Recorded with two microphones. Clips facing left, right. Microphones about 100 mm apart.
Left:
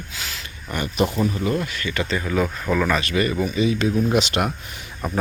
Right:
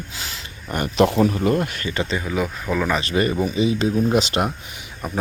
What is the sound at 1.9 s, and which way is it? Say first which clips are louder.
Speech: left 1 dB; 25° right (ahead or behind).